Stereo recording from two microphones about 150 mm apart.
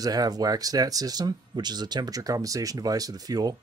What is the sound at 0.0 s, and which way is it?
Speech, 25° right (ahead or behind).